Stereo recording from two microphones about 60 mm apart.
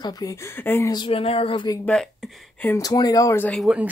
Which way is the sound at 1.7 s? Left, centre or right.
Left.